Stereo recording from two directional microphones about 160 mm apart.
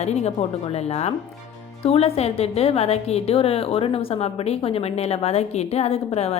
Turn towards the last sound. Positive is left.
turn(degrees=40)  # may be behind; listen again after turning